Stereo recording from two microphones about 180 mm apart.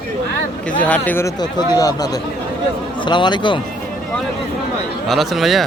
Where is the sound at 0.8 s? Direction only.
10° left (ahead or behind).